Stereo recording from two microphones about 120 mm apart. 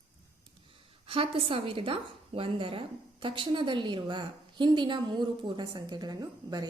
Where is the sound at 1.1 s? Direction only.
50° right (ahead or behind).